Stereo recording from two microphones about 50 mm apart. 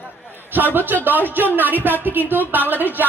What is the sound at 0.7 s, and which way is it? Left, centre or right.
Speech, right.